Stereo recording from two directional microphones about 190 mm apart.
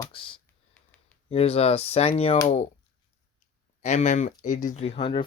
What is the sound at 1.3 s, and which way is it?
Speech, 30° left (ahead or behind).